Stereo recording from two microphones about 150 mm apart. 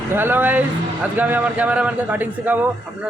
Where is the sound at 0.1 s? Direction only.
15° right (ahead or behind).